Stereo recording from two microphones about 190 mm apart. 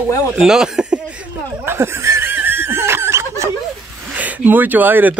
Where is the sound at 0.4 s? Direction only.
5° right (ahead or behind).